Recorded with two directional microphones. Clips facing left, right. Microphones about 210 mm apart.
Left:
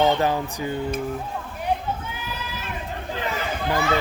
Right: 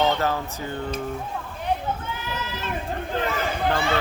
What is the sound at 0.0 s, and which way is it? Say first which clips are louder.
Speech: left 3 dB; 15° left (ahead or behind).